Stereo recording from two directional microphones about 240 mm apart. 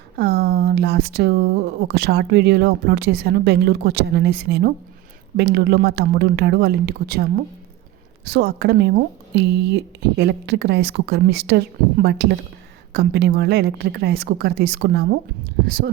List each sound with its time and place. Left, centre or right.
0.2 s speech: right